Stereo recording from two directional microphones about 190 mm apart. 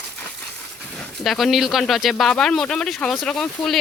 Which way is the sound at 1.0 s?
Centre (ahead or behind).